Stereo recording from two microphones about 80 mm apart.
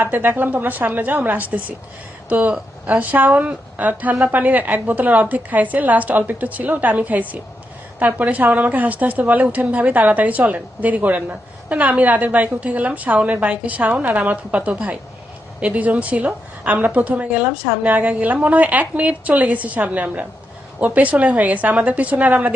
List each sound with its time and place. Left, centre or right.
0.0 s a woman's voice: right